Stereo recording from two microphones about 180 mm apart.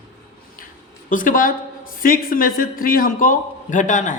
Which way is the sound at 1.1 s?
50° left (ahead or behind).